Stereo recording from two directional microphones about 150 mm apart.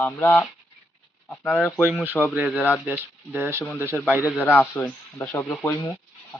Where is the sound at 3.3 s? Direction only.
15° right (ahead or behind).